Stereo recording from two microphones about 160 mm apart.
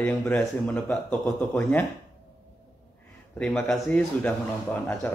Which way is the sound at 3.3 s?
5° left (ahead or behind).